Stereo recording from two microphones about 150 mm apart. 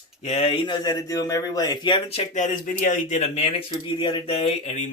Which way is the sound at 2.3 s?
60° left (ahead or behind).